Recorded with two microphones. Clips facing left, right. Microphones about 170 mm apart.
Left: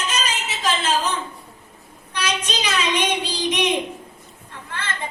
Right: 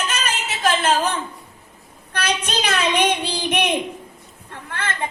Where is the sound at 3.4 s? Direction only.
55° right (ahead or behind).